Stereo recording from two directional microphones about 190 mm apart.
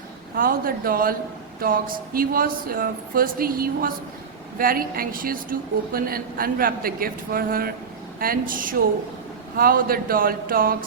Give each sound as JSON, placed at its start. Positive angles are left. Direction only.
{"t": 0.3, "sound": "a woman's voice", "side_deg": -50}